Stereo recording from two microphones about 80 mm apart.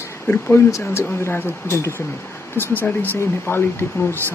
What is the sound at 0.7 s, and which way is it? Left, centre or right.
Speech, left.